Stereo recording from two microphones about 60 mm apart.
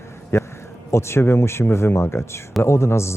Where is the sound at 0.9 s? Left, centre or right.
Left.